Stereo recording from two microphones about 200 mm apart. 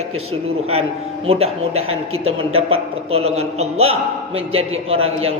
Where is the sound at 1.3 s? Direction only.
30° right (ahead or behind).